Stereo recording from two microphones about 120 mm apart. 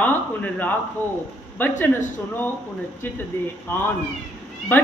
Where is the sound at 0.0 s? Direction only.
15° left (ahead or behind).